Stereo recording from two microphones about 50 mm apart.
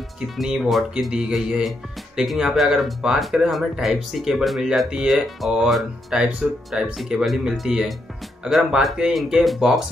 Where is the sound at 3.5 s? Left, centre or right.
Centre.